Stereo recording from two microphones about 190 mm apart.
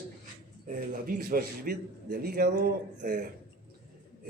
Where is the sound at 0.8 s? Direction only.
50° right (ahead or behind).